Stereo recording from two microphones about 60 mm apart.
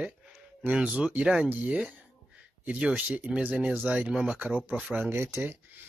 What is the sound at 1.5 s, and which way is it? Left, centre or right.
Speech, right.